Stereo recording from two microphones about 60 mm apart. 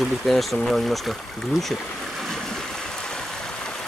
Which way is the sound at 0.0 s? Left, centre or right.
Centre.